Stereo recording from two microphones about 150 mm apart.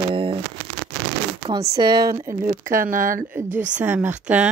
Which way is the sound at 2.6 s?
65° right (ahead or behind).